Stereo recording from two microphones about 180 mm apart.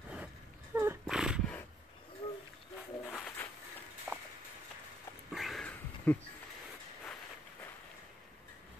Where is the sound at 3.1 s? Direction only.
5° left (ahead or behind).